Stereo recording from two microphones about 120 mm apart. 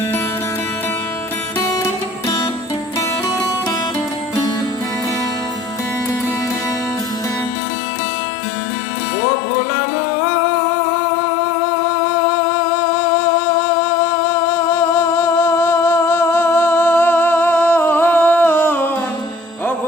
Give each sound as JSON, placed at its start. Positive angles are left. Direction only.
{"t": 1.5, "sound": "music", "side_deg": 25}
{"t": 14.3, "sound": "music", "side_deg": 20}